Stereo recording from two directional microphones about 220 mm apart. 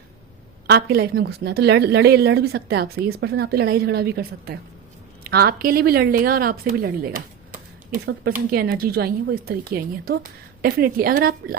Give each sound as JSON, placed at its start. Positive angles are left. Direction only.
{"t": 0.7, "sound": "a woman's voice", "side_deg": -45}